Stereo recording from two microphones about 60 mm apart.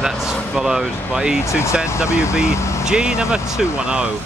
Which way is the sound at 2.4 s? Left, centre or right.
Left.